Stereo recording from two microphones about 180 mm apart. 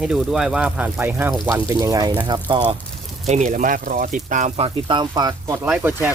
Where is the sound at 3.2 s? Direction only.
40° right (ahead or behind).